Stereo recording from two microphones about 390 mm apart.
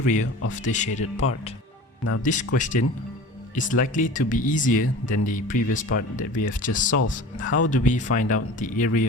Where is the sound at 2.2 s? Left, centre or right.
Centre.